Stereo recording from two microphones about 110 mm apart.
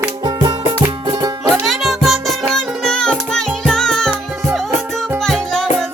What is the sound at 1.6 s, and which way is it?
Music, centre (ahead or behind).